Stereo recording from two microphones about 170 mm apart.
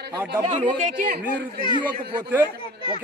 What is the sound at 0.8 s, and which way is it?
Speech, 50° right (ahead or behind).